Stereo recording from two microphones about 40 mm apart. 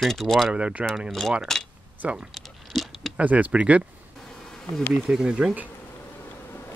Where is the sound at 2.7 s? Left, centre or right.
Centre.